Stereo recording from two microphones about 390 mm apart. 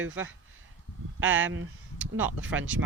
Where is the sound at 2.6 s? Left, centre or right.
Right.